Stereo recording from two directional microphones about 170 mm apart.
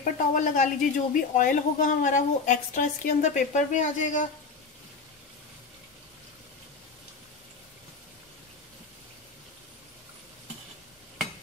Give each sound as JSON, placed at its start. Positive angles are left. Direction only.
{"t": 0.0, "sound": "speech", "side_deg": 50}